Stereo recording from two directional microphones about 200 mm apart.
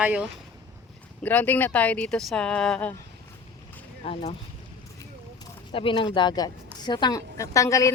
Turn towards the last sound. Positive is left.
turn(degrees=15)  # may be behind; listen again after turning